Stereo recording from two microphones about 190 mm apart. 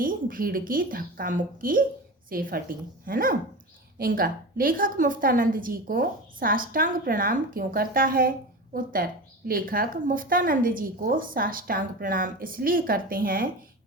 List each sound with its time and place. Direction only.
0.0 s a woman's voice: 45° right (ahead or behind)